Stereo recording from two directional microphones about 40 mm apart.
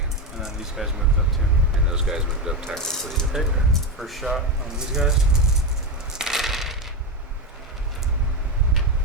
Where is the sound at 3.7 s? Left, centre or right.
Centre.